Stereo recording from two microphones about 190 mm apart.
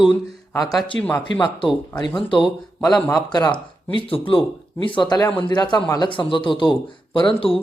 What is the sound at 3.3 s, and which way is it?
Speech, 20° left (ahead or behind).